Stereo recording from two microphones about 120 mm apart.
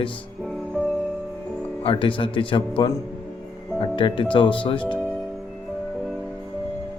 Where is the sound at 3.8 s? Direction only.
45° left (ahead or behind).